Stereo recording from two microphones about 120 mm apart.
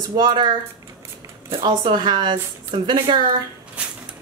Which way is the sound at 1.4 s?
50° right (ahead or behind).